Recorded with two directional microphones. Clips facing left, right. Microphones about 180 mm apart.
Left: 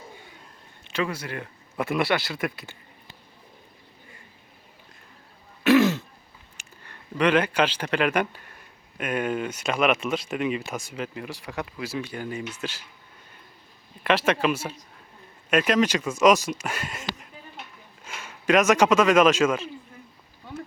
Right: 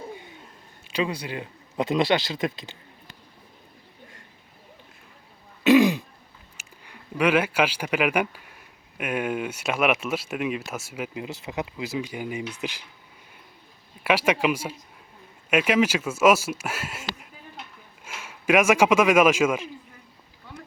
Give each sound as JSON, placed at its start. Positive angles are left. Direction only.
{"t": 0.9, "sound": "speech", "side_deg": -15}
{"t": 5.6, "sound": "throat clearing", "side_deg": -15}
{"t": 6.6, "sound": "a man's voice", "side_deg": -10}
{"t": 14.0, "sound": "a man's voice", "side_deg": -10}